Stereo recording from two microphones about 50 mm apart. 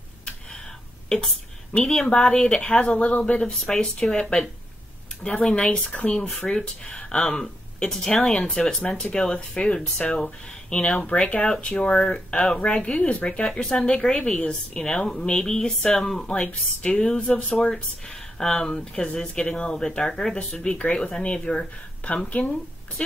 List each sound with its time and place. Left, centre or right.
1.0 s a sound: centre
2.0 s speech: centre
13.5 s speech: centre
17.5 s speech: left
18.4 s speech: centre